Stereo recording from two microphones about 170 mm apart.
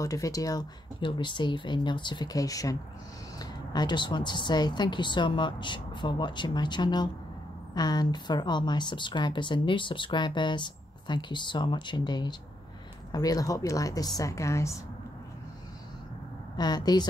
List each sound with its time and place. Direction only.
0.0 s speech: 20° left (ahead or behind)
16.5 s speech: 25° left (ahead or behind)